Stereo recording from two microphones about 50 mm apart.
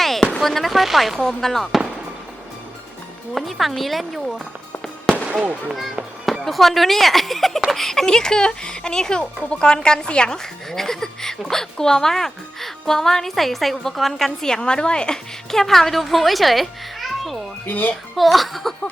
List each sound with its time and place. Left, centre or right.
0.0 s a sound: centre
0.4 s a woman's voice: centre
3.3 s a woman's voice: centre
6.4 s a woman's voice: centre
17.7 s a child's voice: left
18.2 s a woman's voice: centre